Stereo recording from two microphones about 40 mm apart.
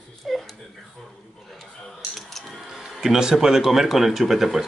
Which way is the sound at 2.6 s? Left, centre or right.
Centre.